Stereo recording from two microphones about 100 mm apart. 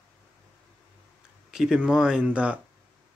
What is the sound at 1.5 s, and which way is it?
Speech, 5° right (ahead or behind).